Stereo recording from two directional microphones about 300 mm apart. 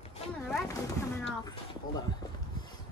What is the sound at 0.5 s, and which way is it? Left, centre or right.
Speech, centre.